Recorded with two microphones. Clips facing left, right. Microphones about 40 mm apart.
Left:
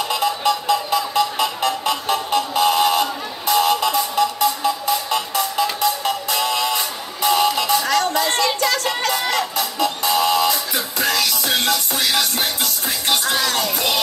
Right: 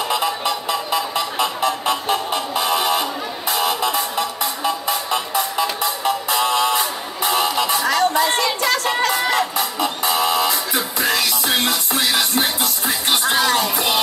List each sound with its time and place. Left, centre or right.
0.1 s music: right
2.6 s buzzer: centre
3.8 s music: right